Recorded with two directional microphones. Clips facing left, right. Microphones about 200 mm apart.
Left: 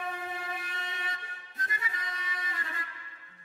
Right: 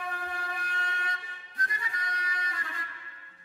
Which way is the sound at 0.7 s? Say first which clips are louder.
Right 3 dB; 25° left (ahead or behind).